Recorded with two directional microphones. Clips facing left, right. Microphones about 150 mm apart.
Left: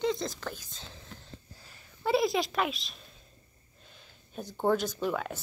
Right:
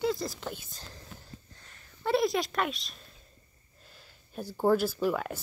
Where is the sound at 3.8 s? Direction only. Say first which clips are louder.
Even; 5° right (ahead or behind).